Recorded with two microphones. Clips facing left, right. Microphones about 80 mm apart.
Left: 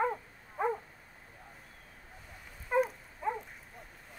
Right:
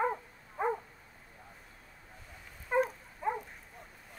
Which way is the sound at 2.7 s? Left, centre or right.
Centre.